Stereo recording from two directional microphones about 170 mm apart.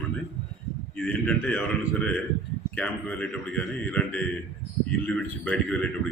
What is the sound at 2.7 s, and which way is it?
Speech, 5° left (ahead or behind).